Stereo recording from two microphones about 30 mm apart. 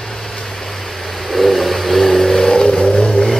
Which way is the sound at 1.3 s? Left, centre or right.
Centre.